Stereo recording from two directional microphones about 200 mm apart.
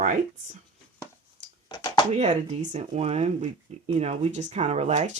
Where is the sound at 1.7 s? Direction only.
20° left (ahead or behind).